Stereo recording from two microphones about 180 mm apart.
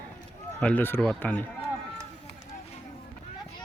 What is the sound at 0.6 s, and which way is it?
Speech, 10° left (ahead or behind).